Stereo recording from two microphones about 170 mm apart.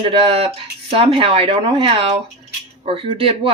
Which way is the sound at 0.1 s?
35° right (ahead or behind).